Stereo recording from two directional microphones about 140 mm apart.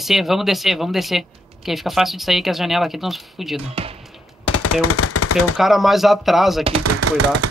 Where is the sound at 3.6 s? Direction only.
45° right (ahead or behind).